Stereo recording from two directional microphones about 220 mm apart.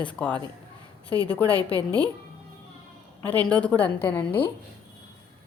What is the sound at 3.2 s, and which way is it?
A woman's voice, 5° left (ahead or behind).